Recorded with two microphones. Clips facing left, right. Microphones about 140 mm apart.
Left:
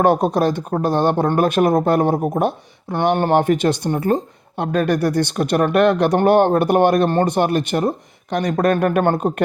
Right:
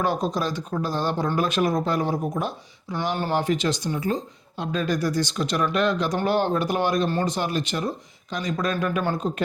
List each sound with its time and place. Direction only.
0.0 s speech: 60° left (ahead or behind)